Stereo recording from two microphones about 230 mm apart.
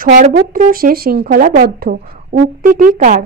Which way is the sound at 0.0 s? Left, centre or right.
Right.